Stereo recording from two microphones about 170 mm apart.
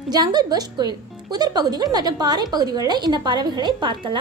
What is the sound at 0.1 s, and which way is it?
Speech, 25° right (ahead or behind).